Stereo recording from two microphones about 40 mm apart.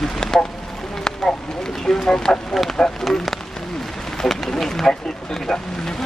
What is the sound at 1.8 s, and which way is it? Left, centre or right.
Speech, centre.